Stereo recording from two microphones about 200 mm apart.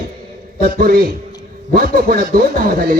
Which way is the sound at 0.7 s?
45° right (ahead or behind).